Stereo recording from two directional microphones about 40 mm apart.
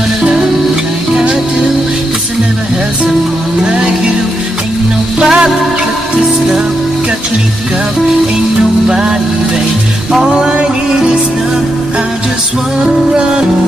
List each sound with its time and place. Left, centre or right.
3.6 s music: centre
5.2 s music: centre
8.8 s music: centre
10.1 s music: centre
12.8 s music: right